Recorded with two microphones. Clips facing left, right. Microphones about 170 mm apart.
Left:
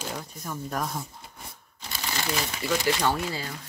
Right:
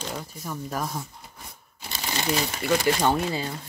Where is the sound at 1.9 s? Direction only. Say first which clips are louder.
Right 3 dB; 20° right (ahead or behind).